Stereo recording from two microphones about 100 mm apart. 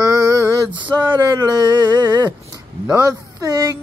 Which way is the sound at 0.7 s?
50° right (ahead or behind).